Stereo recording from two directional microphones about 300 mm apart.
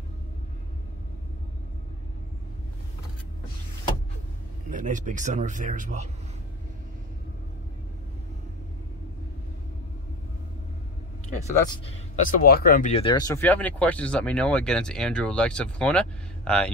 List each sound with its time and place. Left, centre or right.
4.6 s a man's voice: right
11.2 s speech: left; by 16.7 s centre